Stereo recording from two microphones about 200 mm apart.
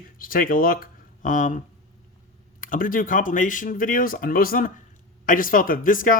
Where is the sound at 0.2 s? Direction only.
45° left (ahead or behind).